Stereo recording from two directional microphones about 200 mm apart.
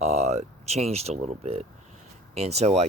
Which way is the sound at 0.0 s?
35° right (ahead or behind).